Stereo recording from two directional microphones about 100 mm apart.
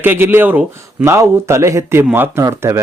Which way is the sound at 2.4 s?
30° right (ahead or behind).